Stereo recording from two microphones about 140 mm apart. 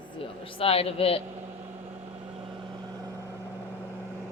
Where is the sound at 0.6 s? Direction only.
45° left (ahead or behind).